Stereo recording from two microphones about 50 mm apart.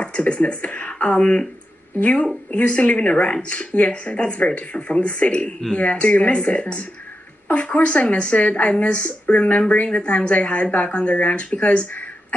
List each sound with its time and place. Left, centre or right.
0.0 s a woman's voice: left